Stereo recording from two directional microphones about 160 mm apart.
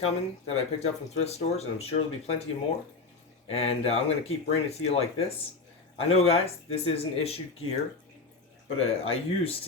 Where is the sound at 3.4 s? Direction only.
40° left (ahead or behind).